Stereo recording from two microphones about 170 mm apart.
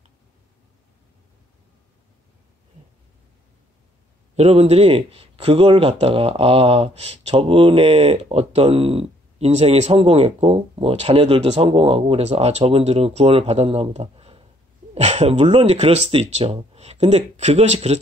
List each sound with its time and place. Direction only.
4.4 s speech: 35° right (ahead or behind)